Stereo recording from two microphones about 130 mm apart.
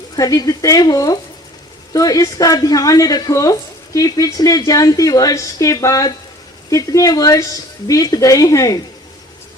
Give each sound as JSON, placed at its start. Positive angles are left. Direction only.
{"t": 0.2, "sound": "a woman's voice", "side_deg": 30}